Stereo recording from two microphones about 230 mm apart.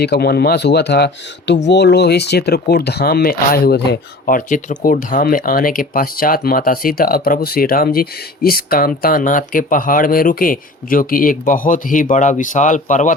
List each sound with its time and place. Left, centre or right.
0.0 s speech: left